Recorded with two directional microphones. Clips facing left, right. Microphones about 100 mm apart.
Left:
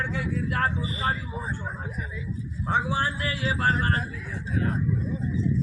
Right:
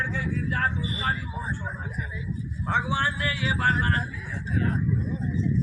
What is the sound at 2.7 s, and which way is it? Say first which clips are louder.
A man's voice: even; 35° left (ahead or behind).